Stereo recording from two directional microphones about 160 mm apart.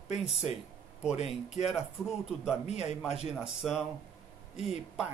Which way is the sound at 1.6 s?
Centre (ahead or behind).